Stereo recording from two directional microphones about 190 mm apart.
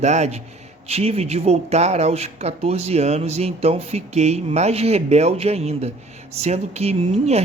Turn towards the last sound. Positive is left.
turn(degrees=-35)  # may be behind; listen again after turning